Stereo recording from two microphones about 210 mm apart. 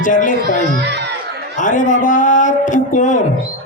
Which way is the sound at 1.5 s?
35° left (ahead or behind).